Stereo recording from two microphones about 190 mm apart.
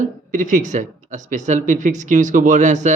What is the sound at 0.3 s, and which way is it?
Speech, 45° right (ahead or behind).